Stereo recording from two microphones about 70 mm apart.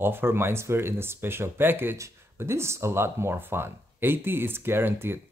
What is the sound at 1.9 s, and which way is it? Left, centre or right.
Speech, right.